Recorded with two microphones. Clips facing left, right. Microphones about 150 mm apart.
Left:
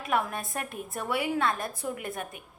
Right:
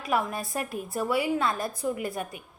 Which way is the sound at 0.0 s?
Centre (ahead or behind).